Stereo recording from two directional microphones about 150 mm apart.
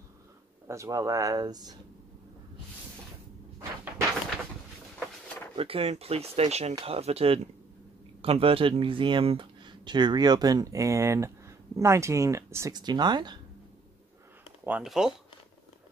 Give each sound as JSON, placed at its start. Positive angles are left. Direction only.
{"t": 0.7, "sound": "speech", "side_deg": -20}
{"t": 5.6, "sound": "speech", "side_deg": -40}
{"t": 14.7, "sound": "speech", "side_deg": -5}